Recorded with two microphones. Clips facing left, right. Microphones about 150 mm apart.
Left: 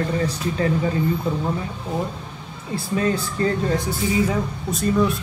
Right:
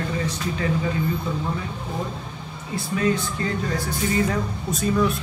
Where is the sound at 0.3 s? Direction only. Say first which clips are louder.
Left 3 dB; 35° left (ahead or behind).